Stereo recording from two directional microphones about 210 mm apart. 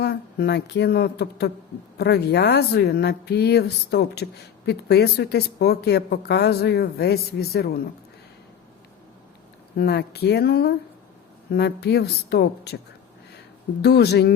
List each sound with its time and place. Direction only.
0.0 s speech: 50° left (ahead or behind)
9.7 s speech: 50° left (ahead or behind)
13.8 s speech: 50° left (ahead or behind)